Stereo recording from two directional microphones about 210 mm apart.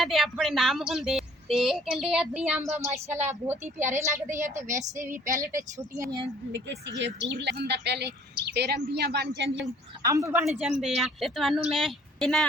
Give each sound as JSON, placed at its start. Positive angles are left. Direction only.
{"t": 0.0, "sound": "a woman's voice", "side_deg": 0}
{"t": 6.5, "sound": "speech", "side_deg": -60}
{"t": 10.1, "sound": "a woman's voice", "side_deg": -15}
{"t": 10.5, "sound": "a woman's voice", "side_deg": 0}